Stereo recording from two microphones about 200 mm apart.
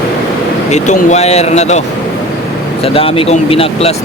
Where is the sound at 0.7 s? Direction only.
35° left (ahead or behind).